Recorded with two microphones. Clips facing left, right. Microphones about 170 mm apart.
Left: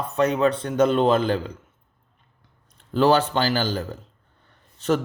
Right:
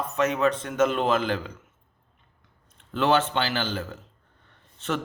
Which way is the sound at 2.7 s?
35° left (ahead or behind).